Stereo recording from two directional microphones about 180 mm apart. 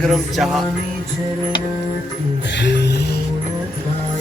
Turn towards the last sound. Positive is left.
turn(degrees=70)  # may be behind; listen again after turning